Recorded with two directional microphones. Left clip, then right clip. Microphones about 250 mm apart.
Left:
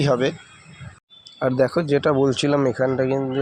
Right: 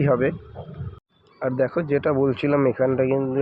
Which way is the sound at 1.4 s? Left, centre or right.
Left.